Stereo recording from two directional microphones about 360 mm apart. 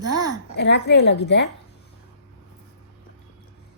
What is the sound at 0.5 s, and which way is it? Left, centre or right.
Speech, left.